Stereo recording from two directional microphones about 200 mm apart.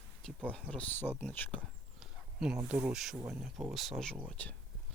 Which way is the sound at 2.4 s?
5° right (ahead or behind).